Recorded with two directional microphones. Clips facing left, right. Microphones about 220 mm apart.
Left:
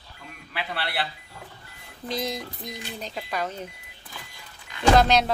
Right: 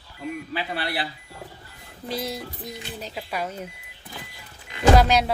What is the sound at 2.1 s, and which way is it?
Speech, 10° right (ahead or behind).